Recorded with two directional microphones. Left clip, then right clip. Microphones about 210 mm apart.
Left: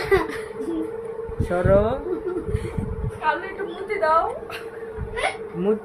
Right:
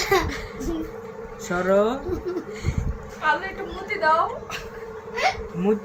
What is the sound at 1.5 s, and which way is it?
Speech, 10° left (ahead or behind).